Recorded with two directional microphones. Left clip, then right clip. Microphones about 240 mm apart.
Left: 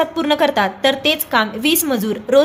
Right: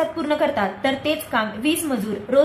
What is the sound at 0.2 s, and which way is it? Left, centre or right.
A woman's voice, left.